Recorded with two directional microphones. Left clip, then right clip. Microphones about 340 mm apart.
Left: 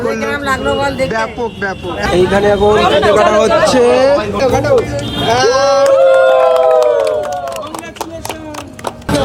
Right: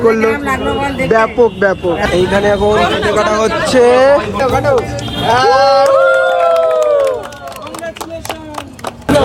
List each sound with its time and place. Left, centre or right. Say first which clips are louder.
0.0 s speech: right 5 dB; centre